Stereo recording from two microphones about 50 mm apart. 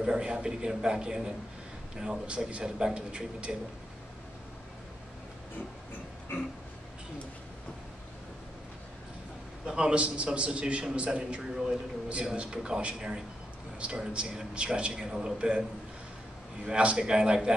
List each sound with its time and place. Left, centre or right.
0.0 s a man's voice: centre
9.7 s a man's voice: centre
16.6 s a man's voice: right